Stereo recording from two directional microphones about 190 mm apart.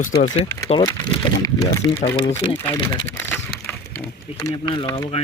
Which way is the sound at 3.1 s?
5° left (ahead or behind).